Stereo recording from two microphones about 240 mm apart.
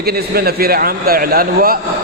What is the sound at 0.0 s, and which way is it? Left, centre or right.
A man's voice, right.